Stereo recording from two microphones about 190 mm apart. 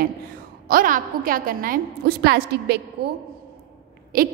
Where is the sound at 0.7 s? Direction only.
45° right (ahead or behind).